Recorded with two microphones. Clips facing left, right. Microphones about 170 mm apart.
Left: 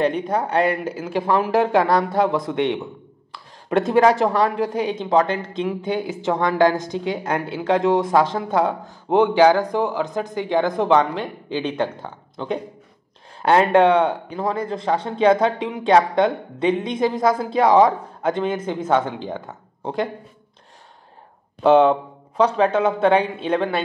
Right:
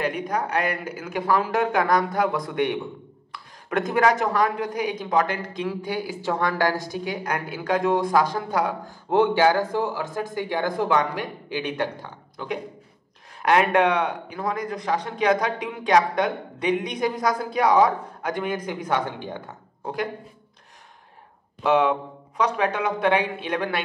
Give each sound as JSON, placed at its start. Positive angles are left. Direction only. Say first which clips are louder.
{"t": 0.0, "sound": "speech", "louder": "left 5 dB", "side_deg": 30}
{"t": 13.4, "sound": "speech", "louder": "left 4 dB", "side_deg": 30}
{"t": 21.6, "sound": "speech", "louder": "left 6 dB", "side_deg": 30}